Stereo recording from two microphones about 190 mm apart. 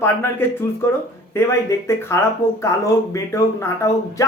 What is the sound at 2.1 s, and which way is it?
Speech, 15° left (ahead or behind).